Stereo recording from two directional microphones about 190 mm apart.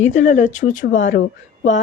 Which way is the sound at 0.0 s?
40° left (ahead or behind).